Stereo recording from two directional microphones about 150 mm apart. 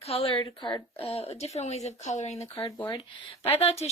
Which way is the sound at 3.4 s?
40° left (ahead or behind).